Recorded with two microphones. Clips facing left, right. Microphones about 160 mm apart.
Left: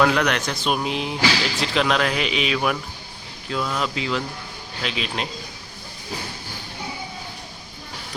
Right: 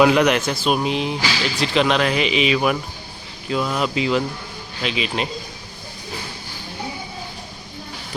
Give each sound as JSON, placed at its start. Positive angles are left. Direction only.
{"t": 0.0, "sound": "speech", "side_deg": -10}
{"t": 4.8, "sound": "speech", "side_deg": 0}